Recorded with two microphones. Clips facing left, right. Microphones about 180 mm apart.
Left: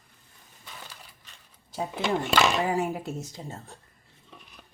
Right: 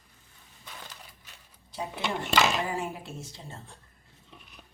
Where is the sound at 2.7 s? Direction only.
40° left (ahead or behind).